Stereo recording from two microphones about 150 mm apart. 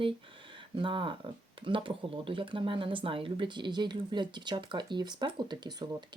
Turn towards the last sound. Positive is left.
turn(degrees=-30)  # may be behind; listen again after turning